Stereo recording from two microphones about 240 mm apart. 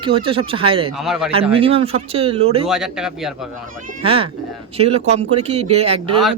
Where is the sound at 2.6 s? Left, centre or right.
Centre.